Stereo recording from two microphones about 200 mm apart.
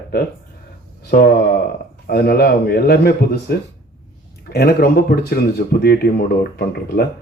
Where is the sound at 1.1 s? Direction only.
50° left (ahead or behind).